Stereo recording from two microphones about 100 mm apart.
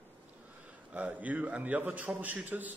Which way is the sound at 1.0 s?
15° right (ahead or behind).